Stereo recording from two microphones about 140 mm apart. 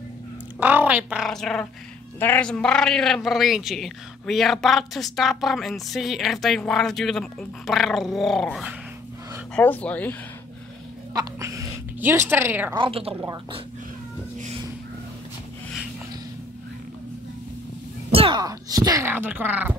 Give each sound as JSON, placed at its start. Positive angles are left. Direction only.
{"t": 0.6, "sound": "speech", "side_deg": -10}
{"t": 1.2, "sound": "a man's voice", "side_deg": 5}
{"t": 2.1, "sound": "a man's voice", "side_deg": 15}
{"t": 9.6, "sound": "speech", "side_deg": 10}
{"t": 11.1, "sound": "speech", "side_deg": -20}
{"t": 12.7, "sound": "speech", "side_deg": -40}
{"t": 18.1, "sound": "speech", "side_deg": -40}
{"t": 18.4, "sound": "speech", "side_deg": -25}